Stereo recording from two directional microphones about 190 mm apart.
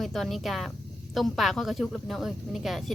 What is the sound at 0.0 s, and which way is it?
Speech, centre (ahead or behind).